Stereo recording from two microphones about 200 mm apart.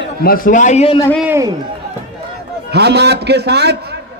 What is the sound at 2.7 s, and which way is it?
A man's voice, 55° right (ahead or behind).